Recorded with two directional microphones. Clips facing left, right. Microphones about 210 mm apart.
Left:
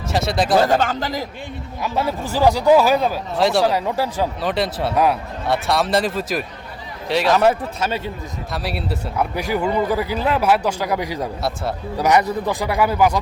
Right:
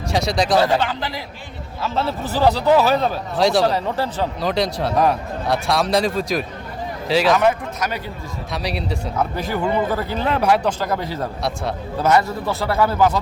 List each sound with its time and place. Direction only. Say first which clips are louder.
0.1 s speech: even; centre (ahead or behind)
0.8 s a man's voice: left 2 dB; 45° left (ahead or behind)
1.8 s speech: even; 10° left (ahead or behind)
7.3 s a man's voice: left 1 dB; 30° left (ahead or behind)
8.5 s speech: right 1 dB; centre (ahead or behind)
11.4 s speech: left 1 dB; 5° left (ahead or behind)
12.0 s speech: left 1 dB; 15° left (ahead or behind)